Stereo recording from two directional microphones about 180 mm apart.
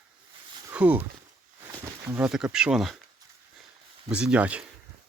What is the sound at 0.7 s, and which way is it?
Speech, 10° right (ahead or behind).